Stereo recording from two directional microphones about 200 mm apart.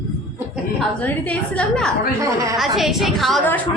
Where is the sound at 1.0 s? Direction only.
5° left (ahead or behind).